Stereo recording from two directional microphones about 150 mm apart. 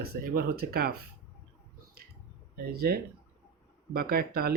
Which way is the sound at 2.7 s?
90° right.